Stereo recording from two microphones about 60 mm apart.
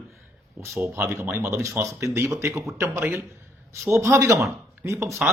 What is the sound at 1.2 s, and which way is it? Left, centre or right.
Speech, right.